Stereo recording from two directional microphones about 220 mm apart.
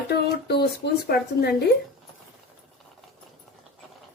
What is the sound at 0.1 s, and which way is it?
Speech, 45° left (ahead or behind).